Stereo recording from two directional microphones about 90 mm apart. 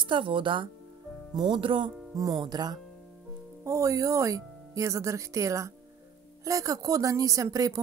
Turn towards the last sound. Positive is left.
turn(degrees=-40)  # may be behind; listen again after turning